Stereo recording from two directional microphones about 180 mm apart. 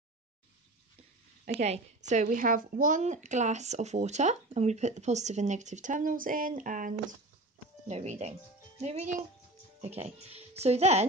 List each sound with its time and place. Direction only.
1.5 s a woman's voice: 35° right (ahead or behind)
7.9 s a woman's voice: 40° right (ahead or behind)